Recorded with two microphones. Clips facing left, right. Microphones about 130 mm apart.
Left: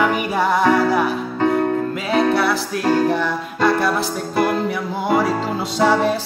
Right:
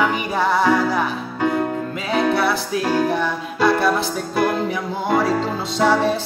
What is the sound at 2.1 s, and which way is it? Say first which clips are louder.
Music: left 1 dB; centre (ahead or behind).